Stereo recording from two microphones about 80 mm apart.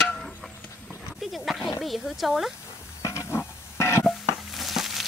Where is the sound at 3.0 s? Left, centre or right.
Left.